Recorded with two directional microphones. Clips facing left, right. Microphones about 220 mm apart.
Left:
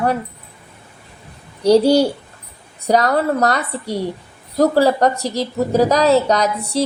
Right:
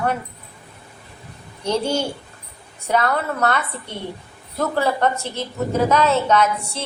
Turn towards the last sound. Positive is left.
turn(degrees=35)  # may be behind; listen again after turning